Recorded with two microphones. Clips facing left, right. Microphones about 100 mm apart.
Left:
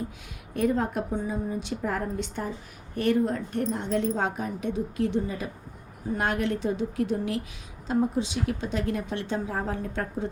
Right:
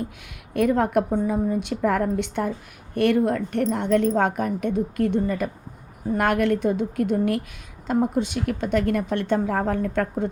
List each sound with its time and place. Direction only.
0.5 s speech: 65° right (ahead or behind)